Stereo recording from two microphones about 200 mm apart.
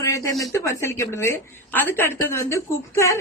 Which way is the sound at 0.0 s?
15° left (ahead or behind).